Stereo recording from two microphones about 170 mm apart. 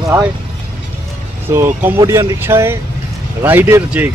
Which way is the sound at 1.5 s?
10° right (ahead or behind).